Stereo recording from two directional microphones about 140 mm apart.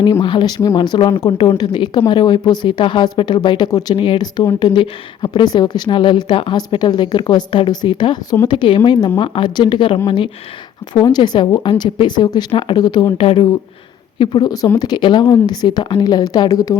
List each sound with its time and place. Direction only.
0.0 s speech: 35° left (ahead or behind)
3.9 s speech: 35° left (ahead or behind)
11.0 s speech: 30° left (ahead or behind)
13.1 s a woman's voice: 40° left (ahead or behind); by 16.7 s 25° left (ahead or behind)